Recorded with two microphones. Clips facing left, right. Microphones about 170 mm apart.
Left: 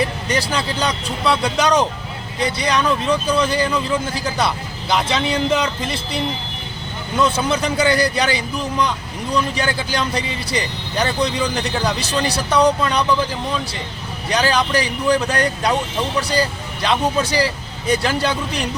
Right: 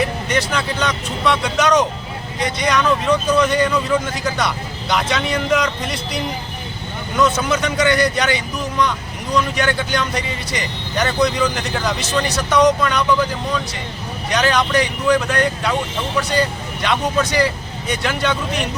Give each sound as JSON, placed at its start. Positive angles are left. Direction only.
{"t": 0.3, "sound": "speech", "side_deg": 35}
{"t": 14.3, "sound": "speech", "side_deg": 30}